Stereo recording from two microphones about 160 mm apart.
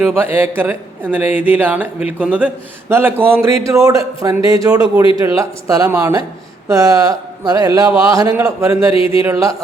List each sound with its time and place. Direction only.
0.0 s a man's voice: 15° right (ahead or behind)